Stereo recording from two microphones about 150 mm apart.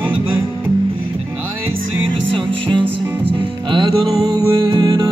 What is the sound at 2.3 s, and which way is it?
Music, 35° right (ahead or behind).